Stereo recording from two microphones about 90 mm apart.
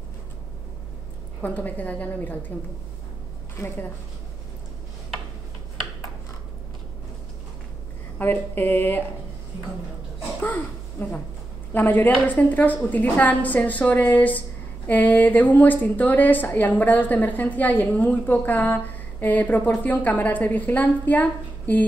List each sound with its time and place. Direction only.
1.4 s a woman's voice: 20° left (ahead or behind)
3.5 s a woman's voice: 30° left (ahead or behind)
8.2 s a woman's voice: 25° left (ahead or behind)
10.4 s a woman's voice: 20° left (ahead or behind)